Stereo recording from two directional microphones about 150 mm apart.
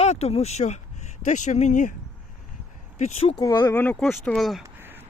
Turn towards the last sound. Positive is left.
turn(degrees=-15)  # may be behind; listen again after turning